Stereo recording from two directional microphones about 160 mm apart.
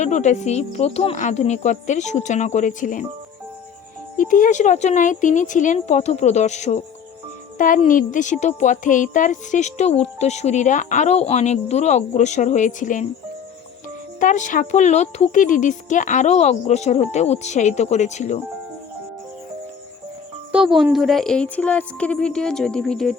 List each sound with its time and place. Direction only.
0.0 s speech: 50° left (ahead or behind)
4.2 s speech: 55° left (ahead or behind)
7.9 s speech: 55° left (ahead or behind)
14.2 s speech: 55° left (ahead or behind)
20.5 s a woman's voice: 5° right (ahead or behind)